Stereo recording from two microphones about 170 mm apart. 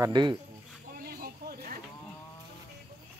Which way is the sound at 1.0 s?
60° right (ahead or behind).